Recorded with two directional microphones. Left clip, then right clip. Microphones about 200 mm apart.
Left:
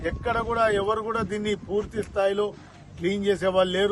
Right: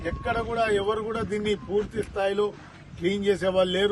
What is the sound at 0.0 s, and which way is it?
A man's voice, centre (ahead or behind).